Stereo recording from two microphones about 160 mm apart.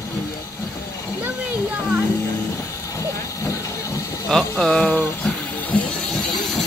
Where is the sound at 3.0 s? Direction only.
20° left (ahead or behind).